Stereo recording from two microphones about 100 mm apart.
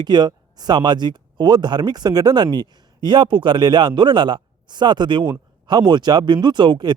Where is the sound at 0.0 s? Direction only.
45° right (ahead or behind).